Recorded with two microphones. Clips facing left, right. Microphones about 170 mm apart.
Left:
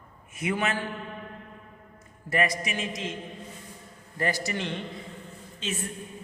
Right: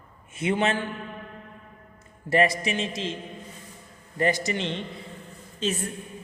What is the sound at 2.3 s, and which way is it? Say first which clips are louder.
Speech: right 5 dB; 30° right (ahead or behind).